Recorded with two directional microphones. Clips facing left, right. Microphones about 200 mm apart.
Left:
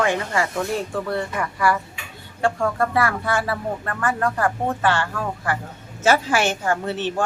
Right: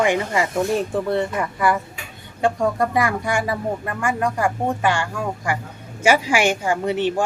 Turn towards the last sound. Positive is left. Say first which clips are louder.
# right 3 dB
turn(degrees=-15)  # may be behind; listen again after turning